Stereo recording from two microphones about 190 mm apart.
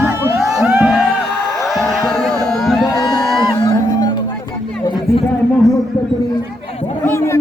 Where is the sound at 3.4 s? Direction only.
20° left (ahead or behind).